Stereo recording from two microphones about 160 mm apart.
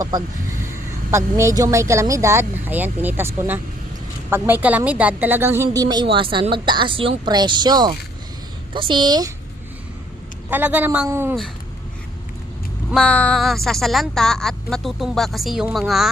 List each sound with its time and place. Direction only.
1.1 s a woman's voice: 20° right (ahead or behind)
10.5 s speech: 10° right (ahead or behind)
12.9 s a woman's voice: 5° left (ahead or behind)